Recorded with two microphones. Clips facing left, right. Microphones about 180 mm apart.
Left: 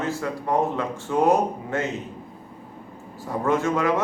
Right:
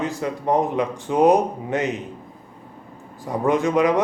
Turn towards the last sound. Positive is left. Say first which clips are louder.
# right 4 dB
turn(degrees=-15)  # may be behind; listen again after turning